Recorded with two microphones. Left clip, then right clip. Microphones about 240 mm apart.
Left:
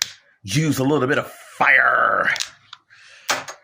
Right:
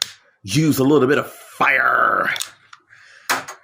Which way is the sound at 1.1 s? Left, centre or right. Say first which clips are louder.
Right 2 dB; left.